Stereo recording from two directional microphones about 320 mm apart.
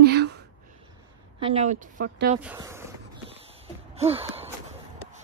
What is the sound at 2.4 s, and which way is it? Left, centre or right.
Speech, centre.